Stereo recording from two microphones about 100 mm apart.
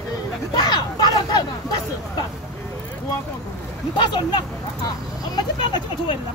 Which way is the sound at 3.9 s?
50° left (ahead or behind).